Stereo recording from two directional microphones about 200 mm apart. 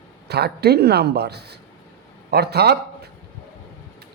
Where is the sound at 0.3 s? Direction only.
55° right (ahead or behind).